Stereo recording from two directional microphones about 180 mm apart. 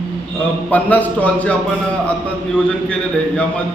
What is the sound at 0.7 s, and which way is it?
Speech, 10° left (ahead or behind).